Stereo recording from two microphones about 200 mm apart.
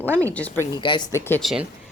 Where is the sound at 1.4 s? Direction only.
5° right (ahead or behind).